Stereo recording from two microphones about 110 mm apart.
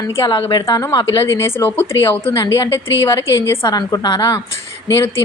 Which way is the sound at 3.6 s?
40° left (ahead or behind).